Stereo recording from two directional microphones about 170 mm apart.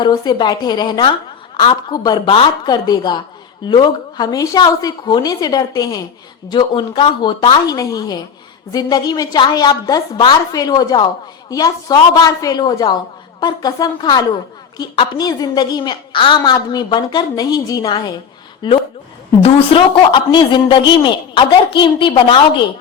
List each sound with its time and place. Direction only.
0.0 s a woman's voice: 25° left (ahead or behind)